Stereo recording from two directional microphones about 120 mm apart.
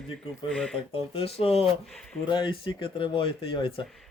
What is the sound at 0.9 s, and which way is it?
Speech, 50° left (ahead or behind).